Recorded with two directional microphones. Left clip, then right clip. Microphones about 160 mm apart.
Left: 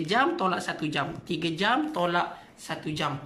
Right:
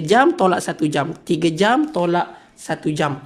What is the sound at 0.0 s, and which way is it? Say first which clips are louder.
A man's voice: right 10 dB; 45° right (ahead or behind).